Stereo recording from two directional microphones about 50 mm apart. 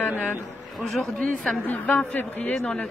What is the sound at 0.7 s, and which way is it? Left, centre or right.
Speech, centre.